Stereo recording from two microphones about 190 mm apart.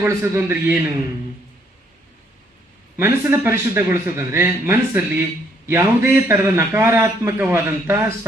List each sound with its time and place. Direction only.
0.0 s a man's voice: 10° right (ahead or behind)
3.0 s a man's voice: 10° right (ahead or behind)